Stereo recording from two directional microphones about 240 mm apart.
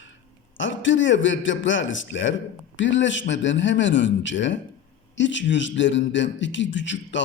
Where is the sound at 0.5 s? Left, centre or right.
Left.